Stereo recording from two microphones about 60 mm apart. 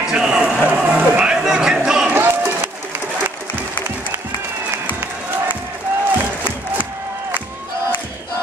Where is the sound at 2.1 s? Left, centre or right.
Right.